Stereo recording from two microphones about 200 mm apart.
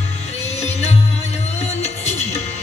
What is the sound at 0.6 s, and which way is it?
Music, 35° left (ahead or behind).